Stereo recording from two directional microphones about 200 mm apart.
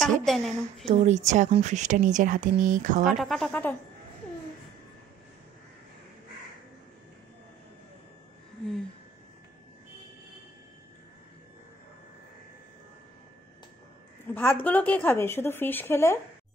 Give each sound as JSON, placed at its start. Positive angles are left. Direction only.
{"t": 0.2, "sound": "a woman's voice", "side_deg": 0}
{"t": 0.8, "sound": "speech", "side_deg": -35}
{"t": 3.2, "sound": "a woman's voice", "side_deg": 0}
{"t": 14.2, "sound": "speech", "side_deg": 10}